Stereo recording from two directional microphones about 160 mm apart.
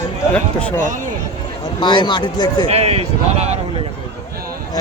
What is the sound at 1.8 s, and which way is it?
Speech, 30° left (ahead or behind).